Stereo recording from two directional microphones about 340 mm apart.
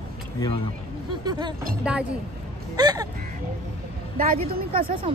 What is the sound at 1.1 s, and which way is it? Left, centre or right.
A man's voice, centre.